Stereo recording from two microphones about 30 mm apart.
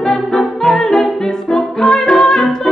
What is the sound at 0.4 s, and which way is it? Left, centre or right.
Music, centre.